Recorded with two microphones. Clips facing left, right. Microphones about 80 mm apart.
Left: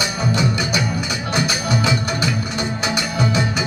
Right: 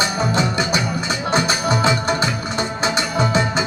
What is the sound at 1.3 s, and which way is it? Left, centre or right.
Music, right.